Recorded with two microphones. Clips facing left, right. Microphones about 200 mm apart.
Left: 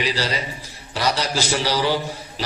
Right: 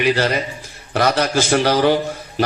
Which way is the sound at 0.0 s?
55° right (ahead or behind).